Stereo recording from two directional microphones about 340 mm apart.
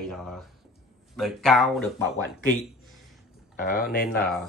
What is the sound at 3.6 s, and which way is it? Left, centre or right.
Speech, left.